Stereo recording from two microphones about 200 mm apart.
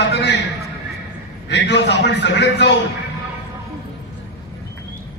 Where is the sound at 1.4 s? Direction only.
60° left (ahead or behind).